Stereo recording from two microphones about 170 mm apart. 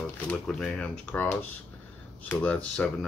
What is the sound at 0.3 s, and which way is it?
Speech, 5° left (ahead or behind).